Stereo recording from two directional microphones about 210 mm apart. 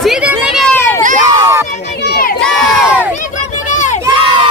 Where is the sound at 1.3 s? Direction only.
15° right (ahead or behind).